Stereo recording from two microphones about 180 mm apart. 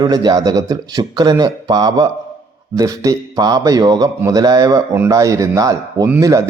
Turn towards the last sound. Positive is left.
turn(degrees=-15)  # may be behind; listen again after turning